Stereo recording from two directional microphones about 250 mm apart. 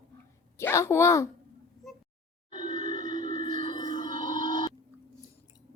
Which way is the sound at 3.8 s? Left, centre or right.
Right.